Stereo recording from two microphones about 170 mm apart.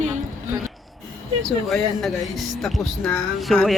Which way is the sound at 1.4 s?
Centre (ahead or behind).